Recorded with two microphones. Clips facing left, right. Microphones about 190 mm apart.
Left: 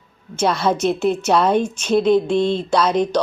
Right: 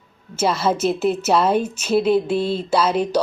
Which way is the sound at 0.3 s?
5° right (ahead or behind).